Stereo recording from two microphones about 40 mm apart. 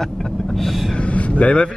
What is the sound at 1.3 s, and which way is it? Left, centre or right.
Speech, left.